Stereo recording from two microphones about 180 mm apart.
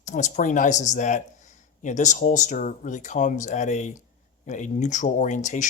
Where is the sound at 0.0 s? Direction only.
45° left (ahead or behind).